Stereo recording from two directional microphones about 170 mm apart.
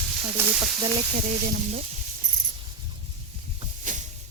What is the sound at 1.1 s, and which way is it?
Speech, 50° right (ahead or behind).